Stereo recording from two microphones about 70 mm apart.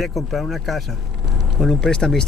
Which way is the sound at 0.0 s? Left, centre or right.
Centre.